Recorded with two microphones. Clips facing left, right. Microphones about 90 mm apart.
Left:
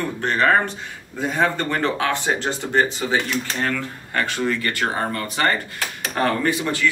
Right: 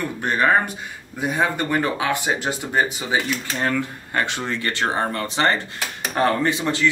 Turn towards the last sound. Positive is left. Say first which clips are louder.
# even
turn(degrees=-25)  # may be behind; listen again after turning